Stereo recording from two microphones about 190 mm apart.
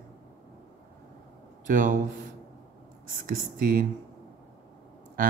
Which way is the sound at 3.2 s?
45° right (ahead or behind).